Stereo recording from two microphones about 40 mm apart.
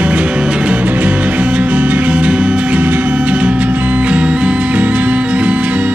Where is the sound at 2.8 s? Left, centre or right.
Right.